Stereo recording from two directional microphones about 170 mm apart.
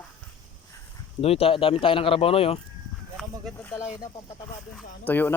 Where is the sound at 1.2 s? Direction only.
35° left (ahead or behind).